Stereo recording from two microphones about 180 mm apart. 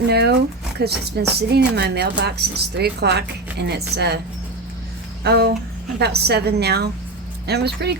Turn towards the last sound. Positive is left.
turn(degrees=-65)  # may be behind; listen again after turning